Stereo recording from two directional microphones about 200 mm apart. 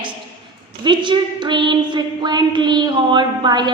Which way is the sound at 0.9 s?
25° right (ahead or behind).